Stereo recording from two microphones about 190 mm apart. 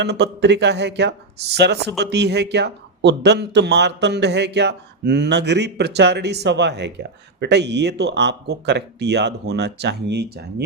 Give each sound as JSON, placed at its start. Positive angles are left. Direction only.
{"t": 0.0, "sound": "speech", "side_deg": -65}